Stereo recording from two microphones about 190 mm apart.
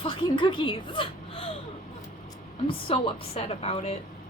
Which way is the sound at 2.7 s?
30° left (ahead or behind).